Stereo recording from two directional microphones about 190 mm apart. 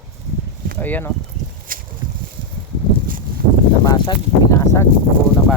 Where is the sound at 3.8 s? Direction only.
20° left (ahead or behind).